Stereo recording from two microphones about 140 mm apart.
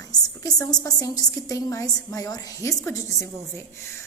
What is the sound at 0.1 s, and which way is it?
A woman's voice, 25° left (ahead or behind).